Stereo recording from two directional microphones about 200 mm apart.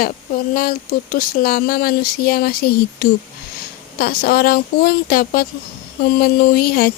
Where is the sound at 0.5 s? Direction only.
45° left (ahead or behind).